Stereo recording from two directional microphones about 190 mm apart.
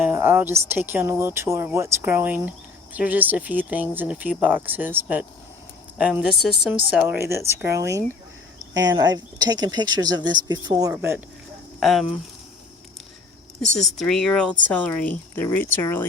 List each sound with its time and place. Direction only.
0.0 s a woman's voice: 10° right (ahead or behind)
11.8 s a woman's voice: centre (ahead or behind)
13.8 s speech: 5° left (ahead or behind)